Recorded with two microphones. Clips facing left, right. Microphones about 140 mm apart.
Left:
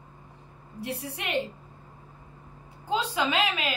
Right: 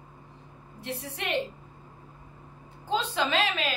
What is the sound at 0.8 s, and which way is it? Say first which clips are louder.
Speech: left 1 dB; 10° left (ahead or behind).